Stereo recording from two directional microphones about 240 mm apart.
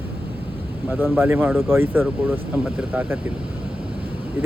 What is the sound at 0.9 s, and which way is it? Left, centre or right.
Speech, centre.